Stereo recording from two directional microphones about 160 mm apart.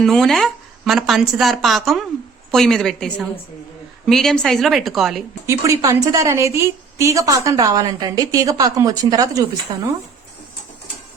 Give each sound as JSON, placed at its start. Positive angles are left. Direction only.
{"t": 0.0, "sound": "speech", "side_deg": 0}
{"t": 5.5, "sound": "a woman's voice", "side_deg": -20}